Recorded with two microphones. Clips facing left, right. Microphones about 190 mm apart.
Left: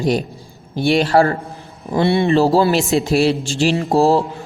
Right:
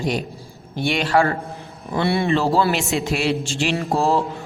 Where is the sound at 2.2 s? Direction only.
35° left (ahead or behind).